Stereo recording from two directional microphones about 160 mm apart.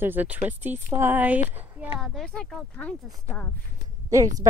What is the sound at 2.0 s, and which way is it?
Speech, centre (ahead or behind).